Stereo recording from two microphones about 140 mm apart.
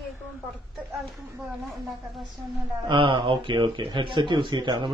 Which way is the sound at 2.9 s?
35° right (ahead or behind).